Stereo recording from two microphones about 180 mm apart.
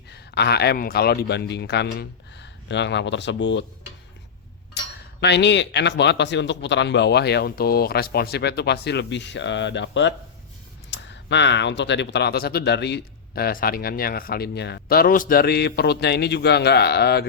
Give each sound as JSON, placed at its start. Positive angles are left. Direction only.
{"t": 0.1, "sound": "speech", "side_deg": 65}
{"t": 5.2, "sound": "speech", "side_deg": 70}